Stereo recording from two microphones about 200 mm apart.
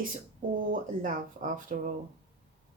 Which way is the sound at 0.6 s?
40° right (ahead or behind).